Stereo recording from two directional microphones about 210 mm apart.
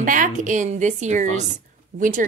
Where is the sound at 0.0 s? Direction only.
40° right (ahead or behind).